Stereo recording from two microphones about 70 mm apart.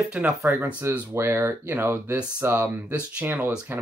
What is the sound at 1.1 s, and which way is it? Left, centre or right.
Speech, right.